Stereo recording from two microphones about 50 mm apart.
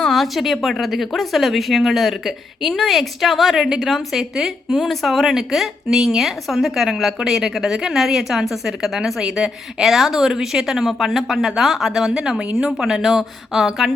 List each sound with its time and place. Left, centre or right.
0.1 s a woman's voice: centre
12.7 s speech: centre